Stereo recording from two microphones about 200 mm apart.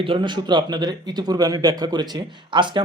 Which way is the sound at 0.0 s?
25° right (ahead or behind).